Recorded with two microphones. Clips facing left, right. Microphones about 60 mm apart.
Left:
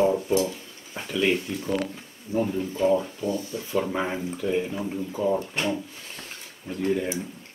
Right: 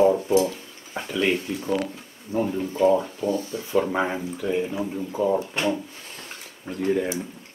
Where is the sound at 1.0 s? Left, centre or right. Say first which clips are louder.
Right 1 dB; centre.